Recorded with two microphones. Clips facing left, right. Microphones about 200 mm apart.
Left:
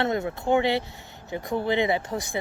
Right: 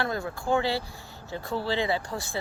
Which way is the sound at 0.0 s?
20° left (ahead or behind).